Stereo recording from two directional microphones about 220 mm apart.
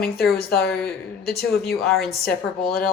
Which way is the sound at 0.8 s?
45° left (ahead or behind).